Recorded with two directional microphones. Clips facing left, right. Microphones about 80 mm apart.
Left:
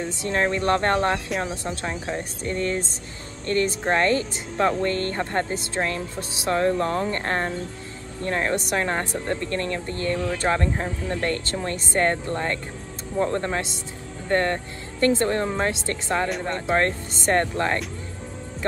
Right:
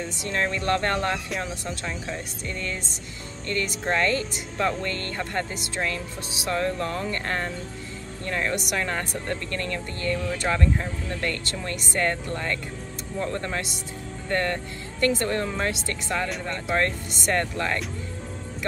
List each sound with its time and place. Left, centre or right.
0.0 s speech: left